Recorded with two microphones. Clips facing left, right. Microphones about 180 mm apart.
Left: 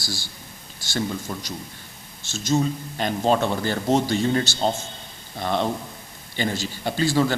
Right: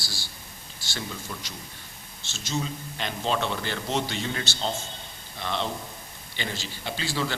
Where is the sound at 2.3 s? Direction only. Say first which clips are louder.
Left 9 dB; 45° left (ahead or behind).